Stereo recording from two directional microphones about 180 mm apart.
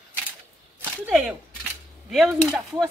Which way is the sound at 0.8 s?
5° left (ahead or behind).